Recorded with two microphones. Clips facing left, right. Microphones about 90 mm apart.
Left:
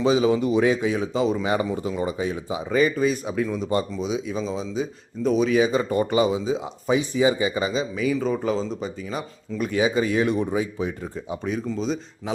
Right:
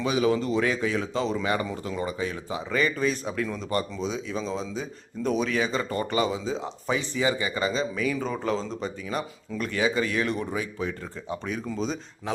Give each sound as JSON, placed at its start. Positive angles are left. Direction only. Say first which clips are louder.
{"t": 0.0, "sound": "speech", "louder": "left 4 dB", "side_deg": 25}
{"t": 11.4, "sound": "speech", "louder": "left 5 dB", "side_deg": 0}